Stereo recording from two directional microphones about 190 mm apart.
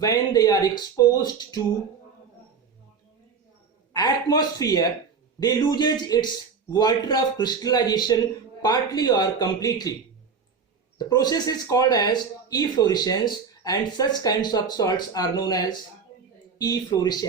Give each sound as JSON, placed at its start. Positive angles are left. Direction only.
{"t": 0.0, "sound": "speech", "side_deg": 20}
{"t": 3.9, "sound": "speech", "side_deg": 20}
{"t": 10.9, "sound": "speech", "side_deg": 20}